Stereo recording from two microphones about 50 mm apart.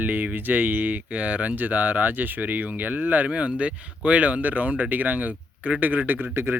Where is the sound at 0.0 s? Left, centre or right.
Right.